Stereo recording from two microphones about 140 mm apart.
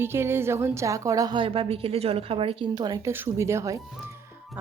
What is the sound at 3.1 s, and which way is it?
Speech, 15° right (ahead or behind).